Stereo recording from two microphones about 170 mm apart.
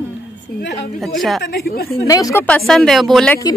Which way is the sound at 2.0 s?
20° left (ahead or behind).